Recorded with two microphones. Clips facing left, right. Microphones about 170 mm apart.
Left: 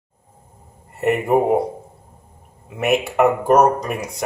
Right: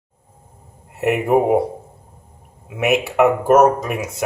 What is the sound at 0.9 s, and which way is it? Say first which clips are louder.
Speech: right 1 dB; centre (ahead or behind).